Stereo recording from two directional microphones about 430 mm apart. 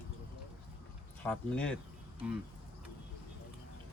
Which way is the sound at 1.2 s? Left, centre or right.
Centre.